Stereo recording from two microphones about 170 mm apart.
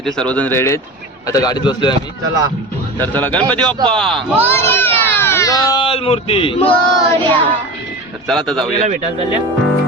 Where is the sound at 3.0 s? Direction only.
10° left (ahead or behind); by 6.6 s 35° left (ahead or behind).